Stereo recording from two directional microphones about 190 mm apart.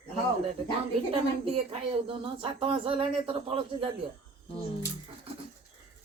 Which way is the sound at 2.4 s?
30° right (ahead or behind).